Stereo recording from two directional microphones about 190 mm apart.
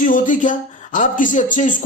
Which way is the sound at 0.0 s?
45° left (ahead or behind).